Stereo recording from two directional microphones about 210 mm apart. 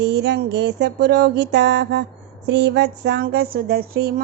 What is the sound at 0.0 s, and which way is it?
Speech, 55° right (ahead or behind).